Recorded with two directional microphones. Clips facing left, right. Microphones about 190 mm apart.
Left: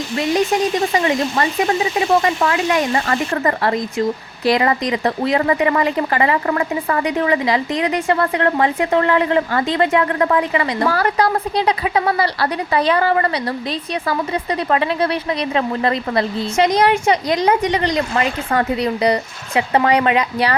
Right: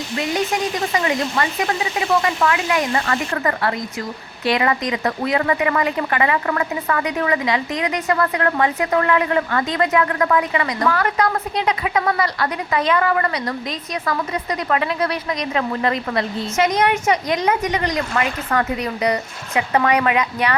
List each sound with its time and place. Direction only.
0.9 s speech: 30° left (ahead or behind)